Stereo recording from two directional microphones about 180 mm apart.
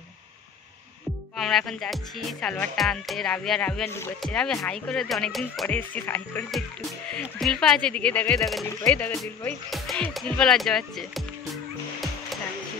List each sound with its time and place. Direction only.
1.3 s speech: centre (ahead or behind)